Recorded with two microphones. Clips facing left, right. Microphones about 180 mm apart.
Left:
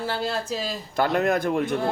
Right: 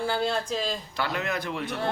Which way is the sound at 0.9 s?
45° left (ahead or behind).